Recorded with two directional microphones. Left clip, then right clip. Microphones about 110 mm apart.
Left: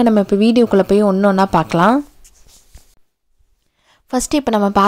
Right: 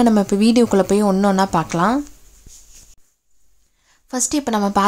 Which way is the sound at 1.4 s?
55° left (ahead or behind).